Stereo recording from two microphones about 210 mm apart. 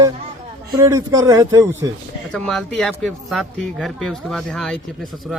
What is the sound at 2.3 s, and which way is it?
Speech, 5° left (ahead or behind).